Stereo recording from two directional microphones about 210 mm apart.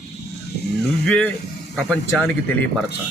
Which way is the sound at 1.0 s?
5° left (ahead or behind).